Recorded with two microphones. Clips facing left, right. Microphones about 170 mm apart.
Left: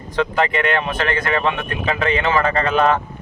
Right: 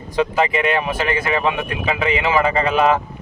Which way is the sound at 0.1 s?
10° right (ahead or behind).